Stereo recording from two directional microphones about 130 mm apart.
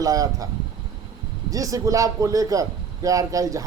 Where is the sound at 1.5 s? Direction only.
25° right (ahead or behind).